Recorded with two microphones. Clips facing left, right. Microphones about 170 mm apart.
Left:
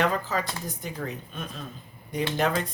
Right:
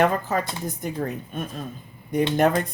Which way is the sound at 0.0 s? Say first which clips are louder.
Right 5 dB; 55° right (ahead or behind).